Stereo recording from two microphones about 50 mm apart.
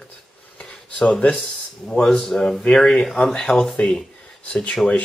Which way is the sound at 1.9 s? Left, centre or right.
Centre.